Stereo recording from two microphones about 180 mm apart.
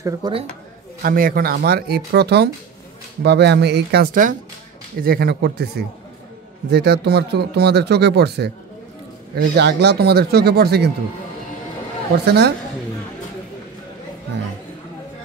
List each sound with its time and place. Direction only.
0.2 s speech: 20° right (ahead or behind)
1.0 s speech: 55° right (ahead or behind)
5.0 s speech: 60° right (ahead or behind)
12.3 s speech: 65° right (ahead or behind)